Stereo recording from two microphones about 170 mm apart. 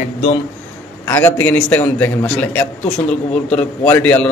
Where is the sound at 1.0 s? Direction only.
15° left (ahead or behind).